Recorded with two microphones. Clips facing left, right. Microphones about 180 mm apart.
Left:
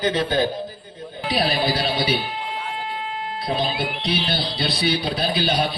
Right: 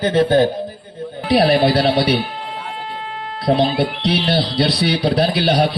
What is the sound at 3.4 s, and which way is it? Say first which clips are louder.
Speech: right 9 dB; 70° right (ahead or behind).